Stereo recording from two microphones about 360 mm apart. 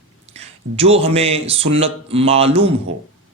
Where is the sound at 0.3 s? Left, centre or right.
Centre.